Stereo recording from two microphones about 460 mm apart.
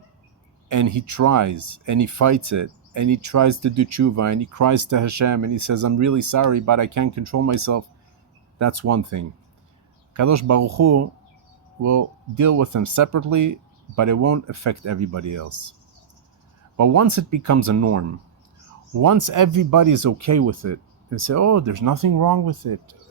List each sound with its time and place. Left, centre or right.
0.7 s speech: right
16.7 s speech: right
19.0 s speech: right